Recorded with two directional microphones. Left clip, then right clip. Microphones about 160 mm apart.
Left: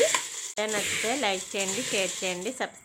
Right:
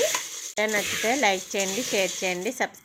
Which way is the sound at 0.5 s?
20° right (ahead or behind).